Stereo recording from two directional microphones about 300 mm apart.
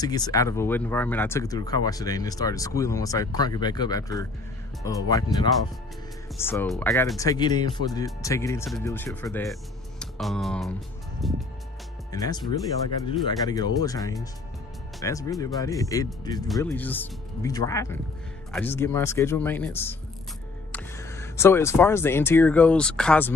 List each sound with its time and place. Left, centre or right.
0.0 s speech: centre
12.1 s speech: centre